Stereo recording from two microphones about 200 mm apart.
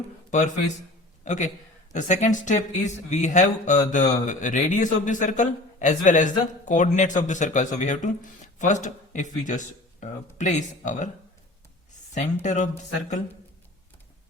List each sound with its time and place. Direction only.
0.3 s a man's voice: 40° left (ahead or behind)
12.1 s speech: 35° left (ahead or behind)